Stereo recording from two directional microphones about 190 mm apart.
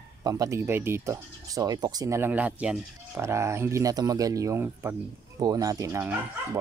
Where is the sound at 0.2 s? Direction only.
20° right (ahead or behind).